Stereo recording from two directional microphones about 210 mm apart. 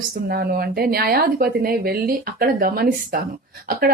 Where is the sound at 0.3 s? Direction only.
45° right (ahead or behind).